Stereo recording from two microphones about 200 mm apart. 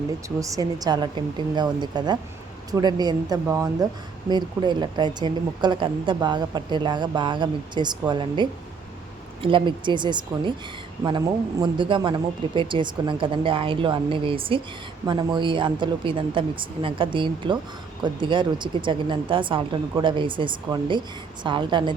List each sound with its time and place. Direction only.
0.3 s a woman's voice: 15° right (ahead or behind)
11.6 s a woman's voice: 25° right (ahead or behind)